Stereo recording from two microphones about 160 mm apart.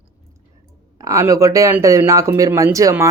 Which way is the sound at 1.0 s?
20° right (ahead or behind).